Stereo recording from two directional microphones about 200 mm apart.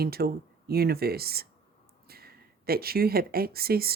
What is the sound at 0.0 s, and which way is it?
Speech, 50° right (ahead or behind).